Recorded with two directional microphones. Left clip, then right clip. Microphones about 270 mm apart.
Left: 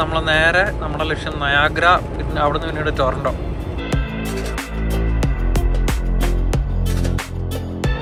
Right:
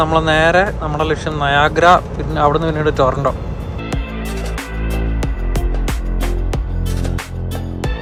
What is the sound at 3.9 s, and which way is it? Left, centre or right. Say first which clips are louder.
Music: left 1 dB; centre.